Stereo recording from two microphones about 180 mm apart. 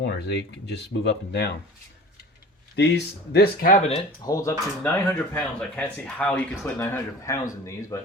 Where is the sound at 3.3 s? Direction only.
55° left (ahead or behind).